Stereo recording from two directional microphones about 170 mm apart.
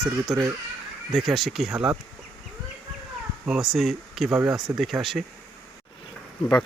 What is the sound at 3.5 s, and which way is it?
Speech, centre (ahead or behind).